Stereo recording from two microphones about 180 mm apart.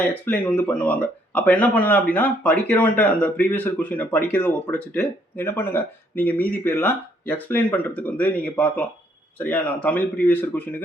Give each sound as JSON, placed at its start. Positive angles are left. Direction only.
{"t": 0.0, "sound": "speech", "side_deg": 10}